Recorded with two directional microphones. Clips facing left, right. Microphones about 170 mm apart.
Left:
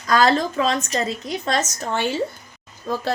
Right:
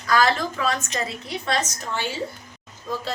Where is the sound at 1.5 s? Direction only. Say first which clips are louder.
Left 3 dB; 50° left (ahead or behind).